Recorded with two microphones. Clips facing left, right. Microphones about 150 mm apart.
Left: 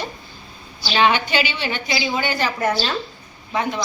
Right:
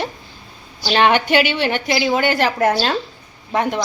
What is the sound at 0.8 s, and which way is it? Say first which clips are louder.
Speech: right 3 dB; 50° right (ahead or behind).